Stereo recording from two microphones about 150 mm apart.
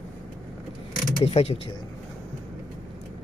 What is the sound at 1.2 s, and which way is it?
Speech, 40° left (ahead or behind).